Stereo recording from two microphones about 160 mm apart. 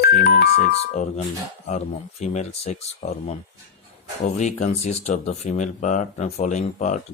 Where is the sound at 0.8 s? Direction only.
45° left (ahead or behind).